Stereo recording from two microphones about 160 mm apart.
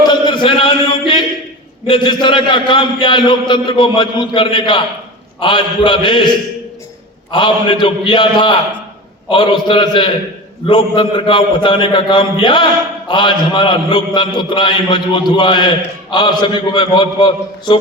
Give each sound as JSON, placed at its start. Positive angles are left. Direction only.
{"t": 0.0, "sound": "chant", "side_deg": 30}
{"t": 1.9, "sound": "a man's voice", "side_deg": 30}